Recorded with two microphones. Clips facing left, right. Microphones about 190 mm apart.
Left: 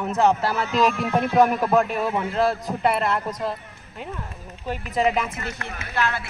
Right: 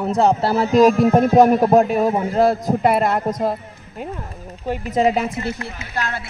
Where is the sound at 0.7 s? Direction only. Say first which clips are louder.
Right 10 dB; 40° right (ahead or behind).